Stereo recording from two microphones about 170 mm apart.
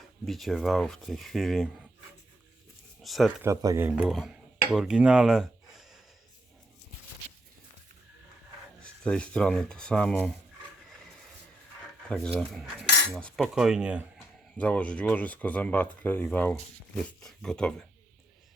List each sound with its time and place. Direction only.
0.3 s speech: centre (ahead or behind)
3.0 s speech: centre (ahead or behind)
3.4 s speech: 20° right (ahead or behind); by 6.0 s centre (ahead or behind)
8.8 s speech: 5° left (ahead or behind)
12.0 s speech: 5° left (ahead or behind)
14.5 s speech: 5° left (ahead or behind)